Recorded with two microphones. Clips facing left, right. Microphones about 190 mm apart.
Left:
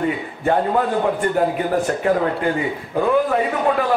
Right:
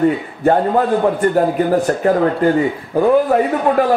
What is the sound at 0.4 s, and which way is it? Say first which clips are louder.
Speech: right 4 dB; 45° right (ahead or behind).